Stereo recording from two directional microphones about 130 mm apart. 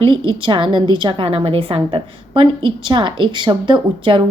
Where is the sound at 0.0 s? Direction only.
40° right (ahead or behind).